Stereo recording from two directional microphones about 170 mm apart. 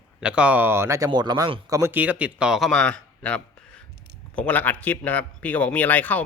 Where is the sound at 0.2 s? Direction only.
5° right (ahead or behind); by 1.6 s 30° right (ahead or behind).